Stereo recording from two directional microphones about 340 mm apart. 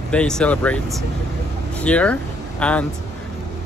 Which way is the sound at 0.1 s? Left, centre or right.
Centre.